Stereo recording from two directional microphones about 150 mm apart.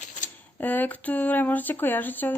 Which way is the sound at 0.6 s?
10° left (ahead or behind).